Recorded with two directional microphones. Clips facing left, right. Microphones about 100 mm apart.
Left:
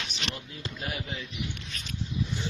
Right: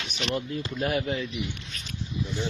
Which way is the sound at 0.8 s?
65° right (ahead or behind).